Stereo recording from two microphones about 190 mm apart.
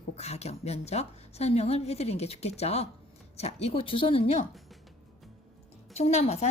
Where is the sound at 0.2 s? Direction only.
35° left (ahead or behind).